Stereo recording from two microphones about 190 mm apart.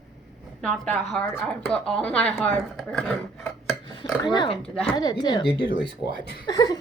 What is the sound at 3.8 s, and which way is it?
Dishes, 25° left (ahead or behind).